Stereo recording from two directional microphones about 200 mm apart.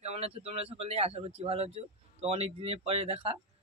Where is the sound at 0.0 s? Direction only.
30° right (ahead or behind).